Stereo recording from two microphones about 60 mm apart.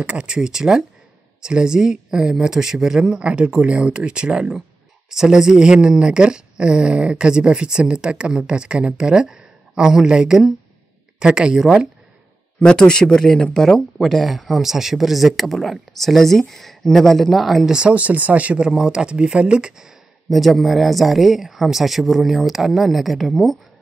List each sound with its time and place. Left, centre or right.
0.0 s speech: centre
12.5 s speech: centre
17.7 s speech: centre
20.2 s speech: centre